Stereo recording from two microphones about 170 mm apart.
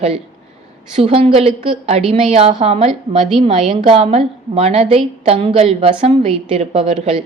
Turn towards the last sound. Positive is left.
turn(degrees=-40)  # may be behind; listen again after turning